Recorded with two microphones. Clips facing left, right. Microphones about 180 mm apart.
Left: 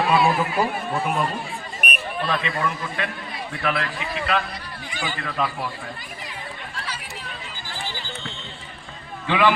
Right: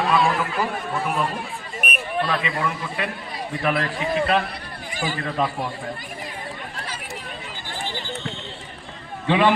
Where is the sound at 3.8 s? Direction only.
35° right (ahead or behind).